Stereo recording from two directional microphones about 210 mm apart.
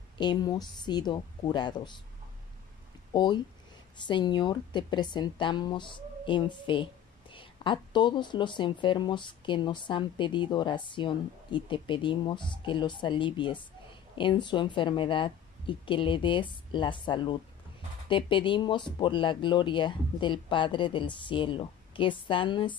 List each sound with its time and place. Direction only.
0.2 s speech: 20° left (ahead or behind)
3.1 s speech: 20° left (ahead or behind)